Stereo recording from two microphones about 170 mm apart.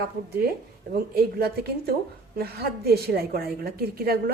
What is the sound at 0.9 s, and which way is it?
A woman's voice, 70° right (ahead or behind).